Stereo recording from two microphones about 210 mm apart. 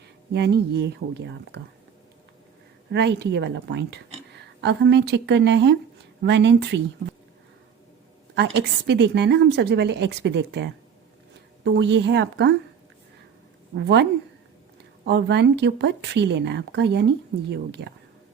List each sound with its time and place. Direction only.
0.3 s speech: 55° right (ahead or behind)
2.9 s a woman's voice: 55° right (ahead or behind)
8.4 s a woman's voice: 55° right (ahead or behind)
13.7 s a woman's voice: 55° right (ahead or behind)
15.0 s a woman's voice: 55° right (ahead or behind)